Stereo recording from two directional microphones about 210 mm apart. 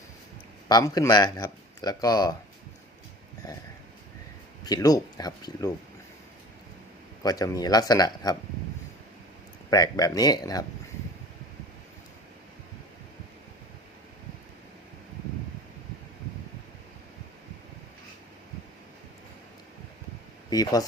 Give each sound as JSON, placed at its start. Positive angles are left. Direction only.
{"t": 0.7, "sound": "speech", "side_deg": 15}
{"t": 4.6, "sound": "speech", "side_deg": 15}
{"t": 7.2, "sound": "speech", "side_deg": 15}
{"t": 9.6, "sound": "speech", "side_deg": 15}
{"t": 20.5, "sound": "speech", "side_deg": 15}